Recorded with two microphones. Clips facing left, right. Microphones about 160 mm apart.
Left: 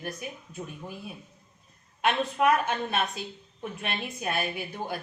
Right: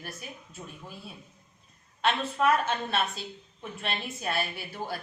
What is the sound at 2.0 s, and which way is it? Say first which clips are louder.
A woman's voice: left 2 dB; 15° left (ahead or behind).